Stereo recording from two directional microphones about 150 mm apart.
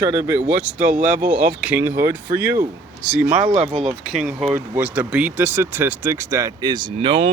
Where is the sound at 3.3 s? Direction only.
45° right (ahead or behind).